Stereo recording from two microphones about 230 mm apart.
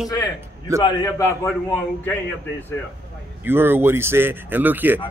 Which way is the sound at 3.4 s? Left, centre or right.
Centre.